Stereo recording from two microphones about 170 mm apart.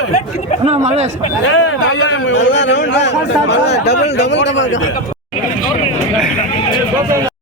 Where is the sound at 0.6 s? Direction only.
40° right (ahead or behind).